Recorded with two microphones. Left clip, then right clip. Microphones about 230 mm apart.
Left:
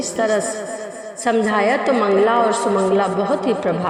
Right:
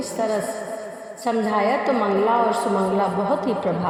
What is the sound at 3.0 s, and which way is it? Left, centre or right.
Speech, left.